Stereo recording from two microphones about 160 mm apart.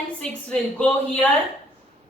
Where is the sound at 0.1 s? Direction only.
5° left (ahead or behind).